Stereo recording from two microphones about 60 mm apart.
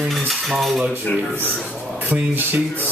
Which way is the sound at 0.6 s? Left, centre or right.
Centre.